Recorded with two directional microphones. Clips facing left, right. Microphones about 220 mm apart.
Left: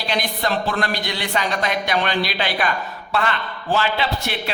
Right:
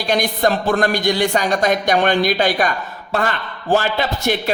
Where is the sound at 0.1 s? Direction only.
45° right (ahead or behind).